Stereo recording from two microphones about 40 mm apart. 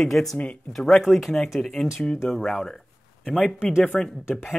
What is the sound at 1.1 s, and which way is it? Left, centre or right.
Speech, centre.